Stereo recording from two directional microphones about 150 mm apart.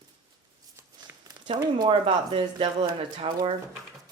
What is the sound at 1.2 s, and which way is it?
Speech, 30° right (ahead or behind).